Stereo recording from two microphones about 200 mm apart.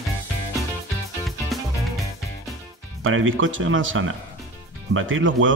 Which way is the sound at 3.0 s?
85° right.